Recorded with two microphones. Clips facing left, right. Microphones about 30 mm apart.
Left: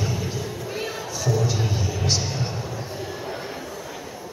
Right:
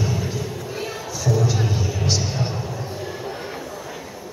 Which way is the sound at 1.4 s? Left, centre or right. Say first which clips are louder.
Right 3 dB; centre.